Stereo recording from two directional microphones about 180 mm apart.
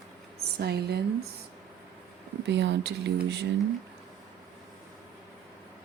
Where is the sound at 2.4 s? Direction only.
75° right (ahead or behind).